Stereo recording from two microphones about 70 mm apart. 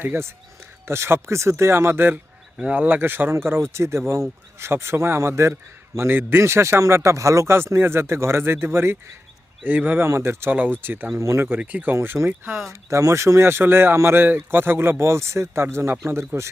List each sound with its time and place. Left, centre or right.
0.0 s speech: right
9.6 s speech: right
10.1 s speech: right
10.5 s speech: right
11.2 s speech: right
11.6 s speech: right
11.9 s speech: right
12.9 s speech: right